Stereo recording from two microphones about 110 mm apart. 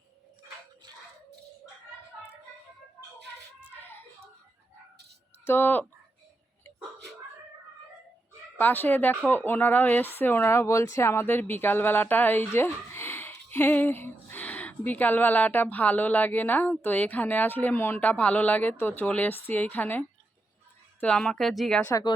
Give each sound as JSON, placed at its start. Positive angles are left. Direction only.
{"t": 3.8, "sound": "a sound", "side_deg": 20}
{"t": 5.5, "sound": "speech", "side_deg": 20}
{"t": 8.5, "sound": "speech", "side_deg": 15}